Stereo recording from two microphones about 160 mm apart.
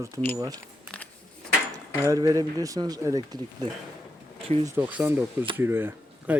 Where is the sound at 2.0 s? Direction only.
20° right (ahead or behind).